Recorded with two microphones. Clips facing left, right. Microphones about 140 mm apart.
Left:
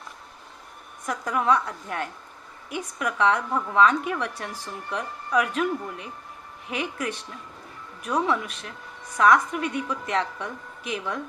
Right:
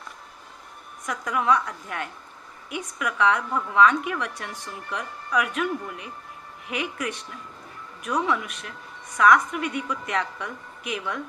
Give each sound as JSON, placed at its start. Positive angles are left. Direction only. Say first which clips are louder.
{"t": 1.0, "sound": "a woman's voice", "louder": "even", "side_deg": 30}
{"t": 6.7, "sound": "a woman's voice", "louder": "even", "side_deg": 30}